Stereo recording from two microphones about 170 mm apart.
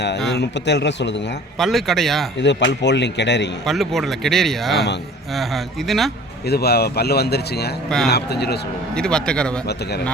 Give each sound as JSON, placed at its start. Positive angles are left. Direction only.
{"t": 0.3, "sound": "a man's voice", "side_deg": 90}
{"t": 1.5, "sound": "speech", "side_deg": 0}
{"t": 2.4, "sound": "a man's voice", "side_deg": 90}
{"t": 3.7, "sound": "speech", "side_deg": 0}
{"t": 6.5, "sound": "speech", "side_deg": 70}
{"t": 7.9, "sound": "speech", "side_deg": 0}
{"t": 8.1, "sound": "speech", "side_deg": 75}
{"t": 9.0, "sound": "speech", "side_deg": 5}